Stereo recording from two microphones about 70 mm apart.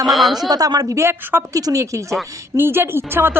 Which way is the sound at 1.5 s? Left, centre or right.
Right.